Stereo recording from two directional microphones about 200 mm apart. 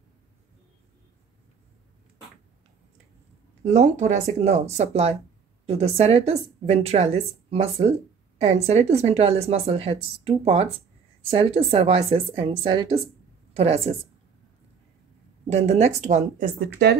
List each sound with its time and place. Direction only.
3.6 s a woman's voice: 35° right (ahead or behind)
15.4 s a woman's voice: 30° right (ahead or behind)